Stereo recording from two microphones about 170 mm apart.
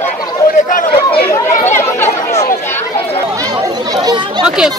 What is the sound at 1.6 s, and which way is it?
Chatter, 15° left (ahead or behind).